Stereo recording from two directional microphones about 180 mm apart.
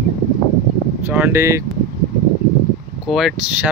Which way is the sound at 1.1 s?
10° right (ahead or behind).